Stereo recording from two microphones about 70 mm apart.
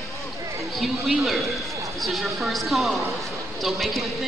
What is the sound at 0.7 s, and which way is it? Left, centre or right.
A woman's voice, centre.